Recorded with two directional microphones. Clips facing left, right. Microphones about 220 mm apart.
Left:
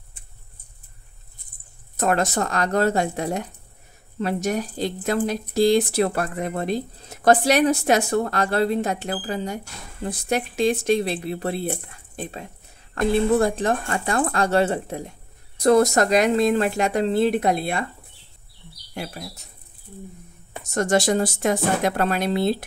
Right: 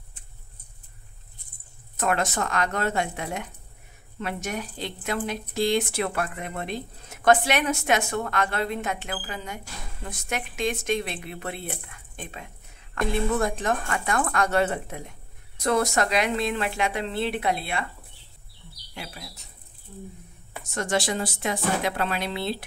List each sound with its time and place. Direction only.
2.0 s speech: 35° left (ahead or behind)
18.9 s speech: 45° left (ahead or behind)
20.7 s speech: 45° left (ahead or behind)